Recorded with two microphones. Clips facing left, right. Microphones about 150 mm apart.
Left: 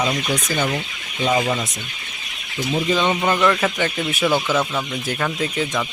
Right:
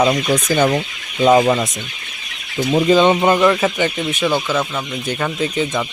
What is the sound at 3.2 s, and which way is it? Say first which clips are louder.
Speech: right 4 dB; 20° right (ahead or behind).